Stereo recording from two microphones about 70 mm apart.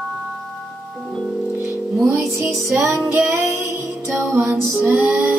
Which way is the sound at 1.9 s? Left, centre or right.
Centre.